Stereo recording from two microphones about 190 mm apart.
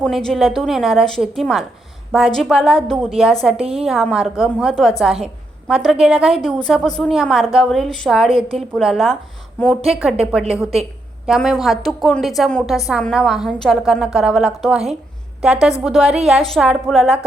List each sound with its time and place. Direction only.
0.0 s a woman's voice: 5° left (ahead or behind)
3.6 s a woman's voice: 30° right (ahead or behind)
3.8 s a woman's voice: centre (ahead or behind)